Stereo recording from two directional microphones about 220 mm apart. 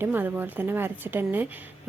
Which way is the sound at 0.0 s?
10° right (ahead or behind).